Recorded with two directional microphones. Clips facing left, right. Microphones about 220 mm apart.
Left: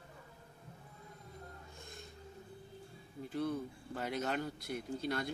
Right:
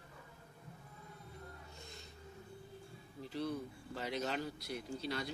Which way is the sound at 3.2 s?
50° left (ahead or behind).